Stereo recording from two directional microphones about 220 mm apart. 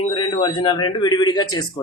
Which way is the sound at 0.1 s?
20° left (ahead or behind).